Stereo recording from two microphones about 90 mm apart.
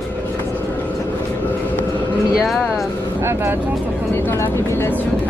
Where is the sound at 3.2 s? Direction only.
30° right (ahead or behind).